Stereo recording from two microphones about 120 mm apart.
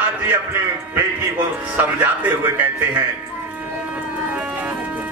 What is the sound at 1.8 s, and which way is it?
Speech, 15° right (ahead or behind).